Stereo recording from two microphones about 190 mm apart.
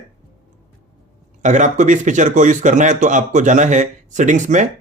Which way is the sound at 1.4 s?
40° right (ahead or behind).